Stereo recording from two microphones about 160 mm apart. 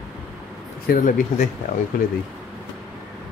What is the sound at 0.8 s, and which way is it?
Speech, 60° left (ahead or behind).